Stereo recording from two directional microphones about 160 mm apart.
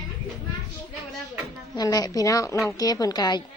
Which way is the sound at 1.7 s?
25° left (ahead or behind).